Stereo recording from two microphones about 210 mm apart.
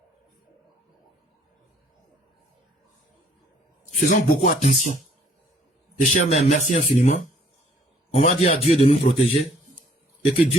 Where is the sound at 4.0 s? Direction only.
40° left (ahead or behind).